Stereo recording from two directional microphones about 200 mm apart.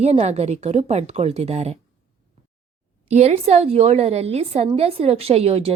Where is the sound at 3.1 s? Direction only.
30° right (ahead or behind).